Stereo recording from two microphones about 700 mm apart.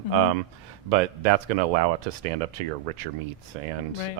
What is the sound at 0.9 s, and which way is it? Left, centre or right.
Speech, right.